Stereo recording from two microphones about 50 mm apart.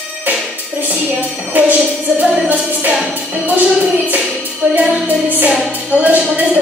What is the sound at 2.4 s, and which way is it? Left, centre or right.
Music, right.